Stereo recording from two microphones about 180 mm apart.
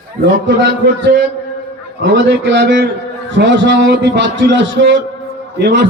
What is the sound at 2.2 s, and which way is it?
A man's voice, 75° right (ahead or behind).